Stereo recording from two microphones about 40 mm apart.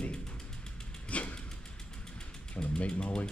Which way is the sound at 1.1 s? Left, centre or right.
Left.